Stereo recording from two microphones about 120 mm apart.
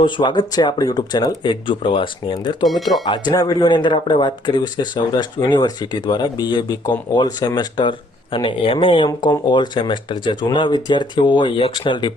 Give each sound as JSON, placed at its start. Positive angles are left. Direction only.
{"t": 0.0, "sound": "speech", "side_deg": 40}
{"t": 2.6, "sound": "speech", "side_deg": 0}
{"t": 3.1, "sound": "speech", "side_deg": 35}